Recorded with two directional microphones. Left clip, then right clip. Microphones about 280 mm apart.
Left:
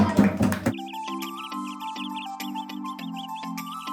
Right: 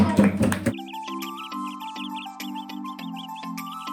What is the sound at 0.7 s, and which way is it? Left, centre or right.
Music, centre.